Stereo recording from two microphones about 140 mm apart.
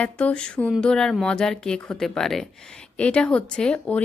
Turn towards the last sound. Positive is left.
turn(degrees=5)  # may be behind; listen again after turning